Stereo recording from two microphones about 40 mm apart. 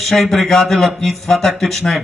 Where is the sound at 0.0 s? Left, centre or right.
Centre.